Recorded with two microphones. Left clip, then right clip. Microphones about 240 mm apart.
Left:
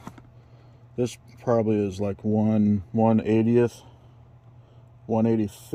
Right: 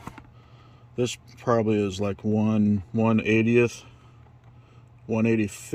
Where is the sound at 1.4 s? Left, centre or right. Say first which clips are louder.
Even; centre.